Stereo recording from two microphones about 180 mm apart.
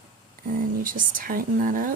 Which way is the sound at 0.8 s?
50° right (ahead or behind).